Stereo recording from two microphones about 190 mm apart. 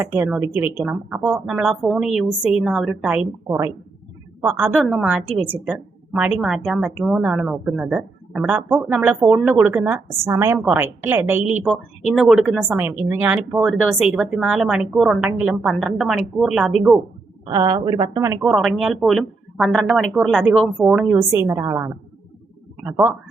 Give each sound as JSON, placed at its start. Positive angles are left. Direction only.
{"t": 0.0, "sound": "a woman's voice", "side_deg": -15}
{"t": 3.4, "sound": "a woman's voice", "side_deg": -15}
{"t": 12.7, "sound": "speech", "side_deg": -10}
{"t": 17.5, "sound": "a woman's voice", "side_deg": -20}
{"t": 18.3, "sound": "a woman's voice", "side_deg": 0}